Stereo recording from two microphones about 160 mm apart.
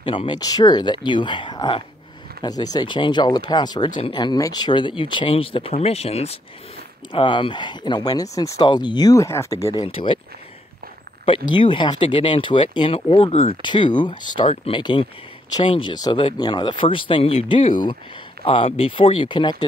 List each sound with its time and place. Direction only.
0.0 s speech: 30° left (ahead or behind)
7.1 s speech: 30° left (ahead or behind)
9.8 s speech: 35° left (ahead or behind)
11.2 s speech: 35° left (ahead or behind)